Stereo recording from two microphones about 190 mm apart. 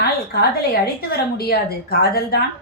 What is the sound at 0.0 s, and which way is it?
A woman's voice, 55° left (ahead or behind).